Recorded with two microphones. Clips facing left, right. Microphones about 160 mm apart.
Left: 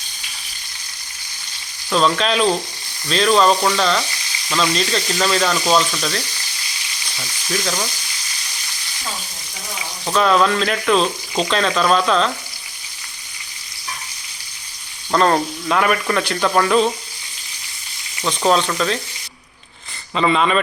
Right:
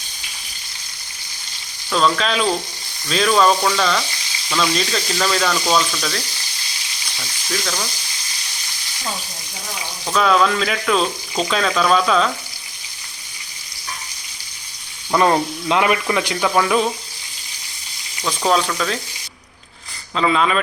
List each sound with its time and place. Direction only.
1.9 s speech: 5° left (ahead or behind)
10.1 s speech: centre (ahead or behind)
15.1 s speech: 10° right (ahead or behind)
18.3 s speech: 5° right (ahead or behind)
20.1 s speech: centre (ahead or behind)